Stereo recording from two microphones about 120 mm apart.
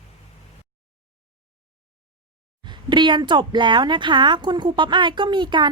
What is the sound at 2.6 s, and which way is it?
A woman's voice, 40° right (ahead or behind).